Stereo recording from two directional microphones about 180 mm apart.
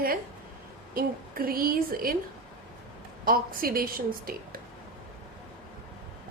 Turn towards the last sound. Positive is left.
turn(degrees=-55)  # may be behind; listen again after turning